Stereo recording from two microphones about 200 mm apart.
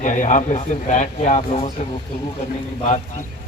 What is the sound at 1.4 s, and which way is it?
Speech, 25° left (ahead or behind).